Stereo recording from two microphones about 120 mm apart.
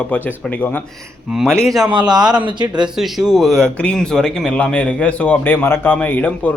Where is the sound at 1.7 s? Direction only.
35° right (ahead or behind).